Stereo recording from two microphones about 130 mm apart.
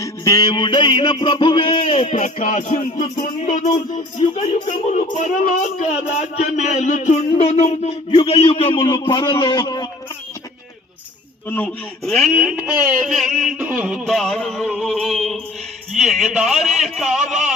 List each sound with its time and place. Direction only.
0.0 s music: 25° left (ahead or behind); by 7.9 s 55° left (ahead or behind)
8.1 s a man's voice: 40° left (ahead or behind)
11.4 s speech: 15° left (ahead or behind)
12.0 s a sound: centre (ahead or behind)